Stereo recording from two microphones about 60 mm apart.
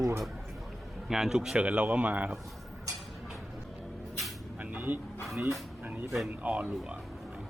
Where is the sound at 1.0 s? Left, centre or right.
Centre.